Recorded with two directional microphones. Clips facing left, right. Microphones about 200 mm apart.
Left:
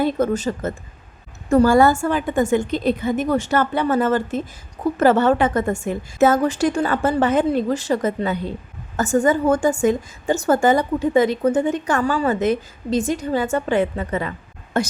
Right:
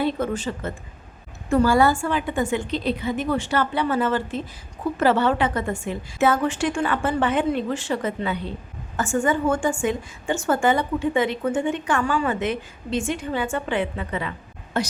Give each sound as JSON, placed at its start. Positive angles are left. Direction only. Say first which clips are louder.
{"t": 0.0, "sound": "a woman's voice", "louder": "left 4 dB", "side_deg": 40}